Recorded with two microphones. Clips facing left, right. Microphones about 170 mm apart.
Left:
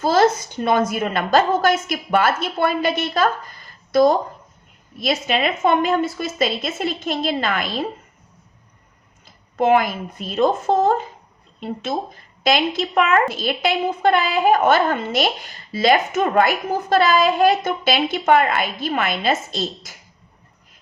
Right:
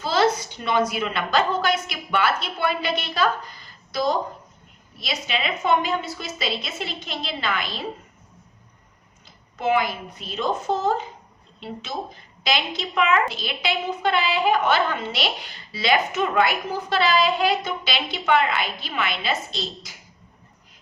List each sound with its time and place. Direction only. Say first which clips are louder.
0.0 s a woman's voice: left 5 dB; 50° left (ahead or behind)
9.6 s a woman's voice: left 6 dB; 50° left (ahead or behind)